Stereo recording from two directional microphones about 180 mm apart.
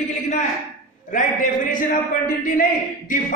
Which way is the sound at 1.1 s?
45° left (ahead or behind).